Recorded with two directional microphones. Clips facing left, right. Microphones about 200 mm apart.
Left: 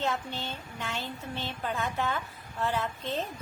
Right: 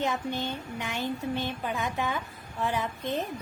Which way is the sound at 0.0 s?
15° right (ahead or behind).